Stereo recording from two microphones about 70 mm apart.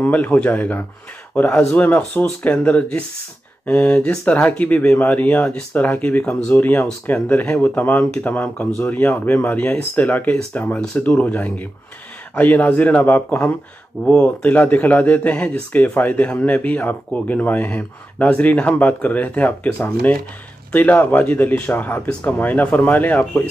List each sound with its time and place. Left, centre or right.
0.0 s speech: left
1.3 s speech: centre
1.8 s speech: left